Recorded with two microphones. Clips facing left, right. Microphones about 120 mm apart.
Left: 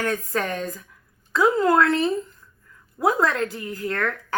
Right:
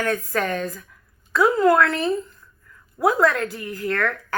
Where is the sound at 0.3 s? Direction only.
25° left (ahead or behind).